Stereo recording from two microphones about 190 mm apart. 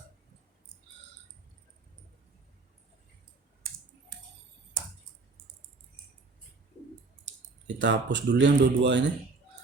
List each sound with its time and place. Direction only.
7.7 s speech: 70° right (ahead or behind)